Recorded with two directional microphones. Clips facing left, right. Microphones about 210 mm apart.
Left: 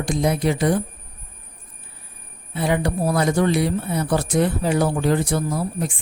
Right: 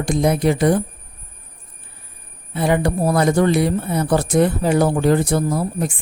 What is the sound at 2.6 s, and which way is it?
Speech, 50° right (ahead or behind).